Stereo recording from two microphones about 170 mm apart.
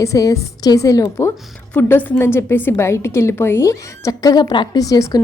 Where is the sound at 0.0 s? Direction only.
20° left (ahead or behind).